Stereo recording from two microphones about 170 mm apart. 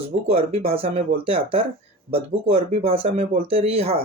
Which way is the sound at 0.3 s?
35° right (ahead or behind).